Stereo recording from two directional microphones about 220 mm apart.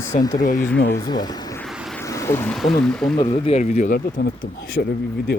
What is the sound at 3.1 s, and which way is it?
Speech, 20° left (ahead or behind).